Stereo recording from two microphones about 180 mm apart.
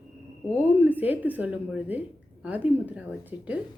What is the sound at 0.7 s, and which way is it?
A woman's voice, 10° right (ahead or behind).